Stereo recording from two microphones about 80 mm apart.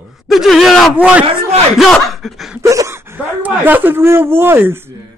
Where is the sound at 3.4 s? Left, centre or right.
Right.